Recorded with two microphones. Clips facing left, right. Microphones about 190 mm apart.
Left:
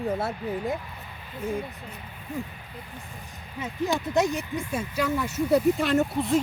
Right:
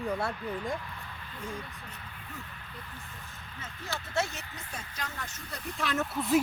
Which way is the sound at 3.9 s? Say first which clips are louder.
Left 8 dB; 15° left (ahead or behind).